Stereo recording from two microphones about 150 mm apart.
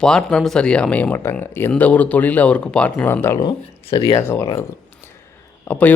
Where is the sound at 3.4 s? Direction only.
30° left (ahead or behind).